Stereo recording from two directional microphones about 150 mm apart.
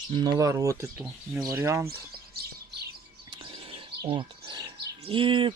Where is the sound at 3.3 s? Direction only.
35° right (ahead or behind).